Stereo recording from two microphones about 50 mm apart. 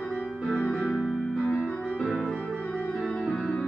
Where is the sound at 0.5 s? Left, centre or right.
Left.